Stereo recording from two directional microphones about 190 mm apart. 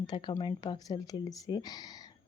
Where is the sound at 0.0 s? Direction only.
25° left (ahead or behind).